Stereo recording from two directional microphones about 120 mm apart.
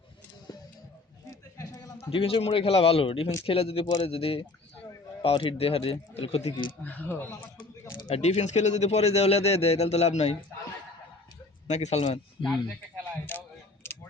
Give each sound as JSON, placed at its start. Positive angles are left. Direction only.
{"t": 1.3, "sound": "a sound", "side_deg": 30}
{"t": 2.0, "sound": "speech", "side_deg": 50}
{"t": 6.8, "sound": "speech", "side_deg": 15}
{"t": 8.0, "sound": "speech", "side_deg": 65}
{"t": 11.7, "sound": "speech", "side_deg": 65}
{"t": 13.3, "sound": "a sound", "side_deg": 15}